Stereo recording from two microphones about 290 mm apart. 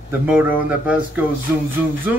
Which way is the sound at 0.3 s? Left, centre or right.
Centre.